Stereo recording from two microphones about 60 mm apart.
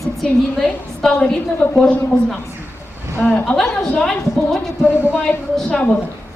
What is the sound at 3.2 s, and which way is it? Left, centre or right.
Speech, left.